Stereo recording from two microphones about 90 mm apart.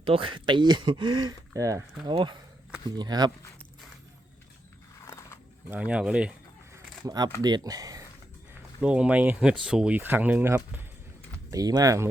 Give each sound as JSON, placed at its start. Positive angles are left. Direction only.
{"t": 0.0, "sound": "speech", "side_deg": -80}
{"t": 2.0, "sound": "speech", "side_deg": -60}
{"t": 2.9, "sound": "speech", "side_deg": -50}
{"t": 5.0, "sound": "a sound", "side_deg": 35}
{"t": 5.7, "sound": "speech", "side_deg": -15}
{"t": 7.0, "sound": "speech", "side_deg": -50}
{"t": 8.8, "sound": "speech", "side_deg": -15}
{"t": 9.9, "sound": "speech", "side_deg": -20}
{"t": 11.5, "sound": "speech", "side_deg": -45}